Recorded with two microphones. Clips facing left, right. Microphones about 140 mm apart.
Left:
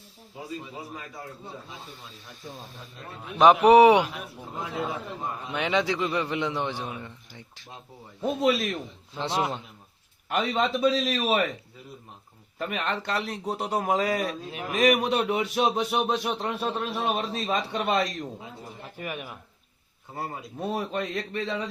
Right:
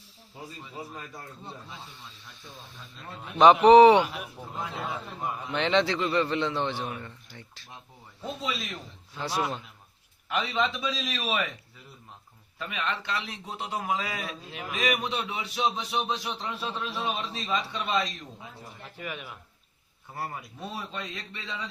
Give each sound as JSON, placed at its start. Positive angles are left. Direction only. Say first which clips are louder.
{"t": 3.3, "sound": "a man's voice", "louder": "right 1 dB", "side_deg": 5}
{"t": 5.5, "sound": "a man's voice", "louder": "right 1 dB", "side_deg": 10}
{"t": 8.2, "sound": "a man's voice", "louder": "left 10 dB", "side_deg": 50}
{"t": 9.1, "sound": "a man's voice", "louder": "left 2 dB", "side_deg": 25}
{"t": 10.2, "sound": "a man's voice", "louder": "left 3 dB", "side_deg": 45}
{"t": 12.5, "sound": "a man's voice", "louder": "left 3 dB", "side_deg": 45}
{"t": 20.1, "sound": "a man's voice", "louder": "left 1 dB", "side_deg": 20}
{"t": 20.6, "sound": "a man's voice", "louder": "left 9 dB", "side_deg": 50}